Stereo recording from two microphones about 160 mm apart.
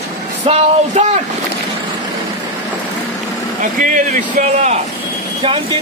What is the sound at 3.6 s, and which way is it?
Speech, 55° right (ahead or behind).